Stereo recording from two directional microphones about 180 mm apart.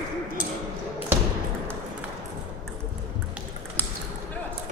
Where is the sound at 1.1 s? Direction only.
10° right (ahead or behind).